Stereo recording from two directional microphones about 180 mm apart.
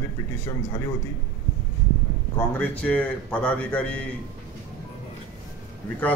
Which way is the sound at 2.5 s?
10° left (ahead or behind).